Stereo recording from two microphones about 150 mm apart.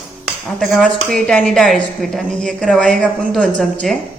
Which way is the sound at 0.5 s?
Centre (ahead or behind).